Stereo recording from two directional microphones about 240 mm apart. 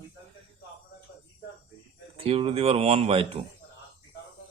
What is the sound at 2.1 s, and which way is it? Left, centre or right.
Speech, right.